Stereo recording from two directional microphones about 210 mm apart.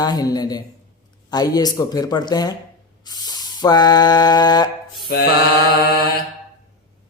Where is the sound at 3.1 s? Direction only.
20° left (ahead or behind).